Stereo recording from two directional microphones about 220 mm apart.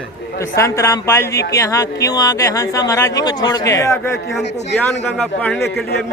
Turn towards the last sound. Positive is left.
turn(degrees=45)  # may be behind; listen again after turning